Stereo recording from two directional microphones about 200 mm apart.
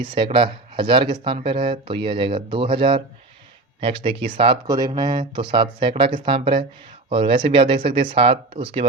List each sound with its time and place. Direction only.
0.2 s speech: 25° right (ahead or behind)